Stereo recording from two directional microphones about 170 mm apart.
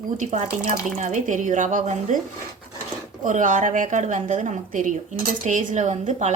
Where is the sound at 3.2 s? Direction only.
50° right (ahead or behind).